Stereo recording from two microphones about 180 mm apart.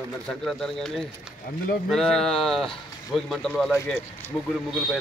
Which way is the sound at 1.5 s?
50° left (ahead or behind).